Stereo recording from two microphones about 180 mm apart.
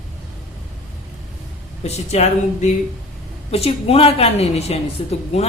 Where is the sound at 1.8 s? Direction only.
35° left (ahead or behind).